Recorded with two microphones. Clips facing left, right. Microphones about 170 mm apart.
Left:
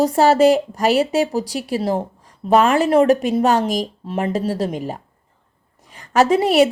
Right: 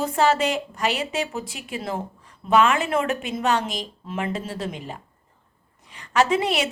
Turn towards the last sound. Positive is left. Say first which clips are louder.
# left 7 dB
turn(degrees=40)  # may be behind; listen again after turning